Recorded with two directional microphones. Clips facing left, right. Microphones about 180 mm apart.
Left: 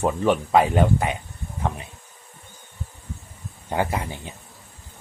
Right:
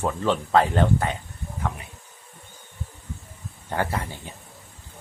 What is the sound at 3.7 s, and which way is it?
Speech, 15° left (ahead or behind).